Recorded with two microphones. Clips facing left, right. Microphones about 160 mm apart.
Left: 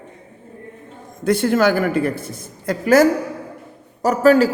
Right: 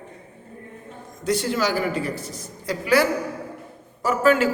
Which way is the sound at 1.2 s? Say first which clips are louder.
Left 7 dB; 55° left (ahead or behind).